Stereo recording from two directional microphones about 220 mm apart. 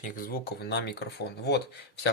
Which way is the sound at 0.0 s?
40° left (ahead or behind).